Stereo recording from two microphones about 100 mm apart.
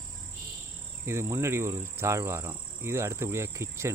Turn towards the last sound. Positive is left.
turn(degrees=-30)  # may be behind; listen again after turning